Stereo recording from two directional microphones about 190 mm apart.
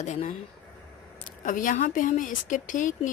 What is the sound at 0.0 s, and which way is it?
Speech, 35° left (ahead or behind).